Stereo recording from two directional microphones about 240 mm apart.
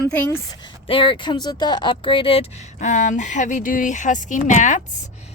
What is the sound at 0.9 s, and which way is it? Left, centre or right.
Speech, left.